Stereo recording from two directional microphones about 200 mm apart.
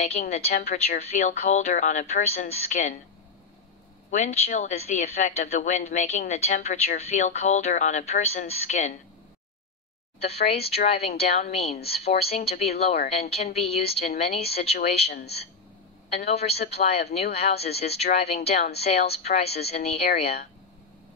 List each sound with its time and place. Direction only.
0.0 s a woman's voice: 35° left (ahead or behind)
4.1 s a woman's voice: 35° left (ahead or behind)
10.2 s a woman's voice: 30° left (ahead or behind)
15.0 s a woman's voice: 55° left (ahead or behind)
16.3 s a woman's voice: 30° left (ahead or behind)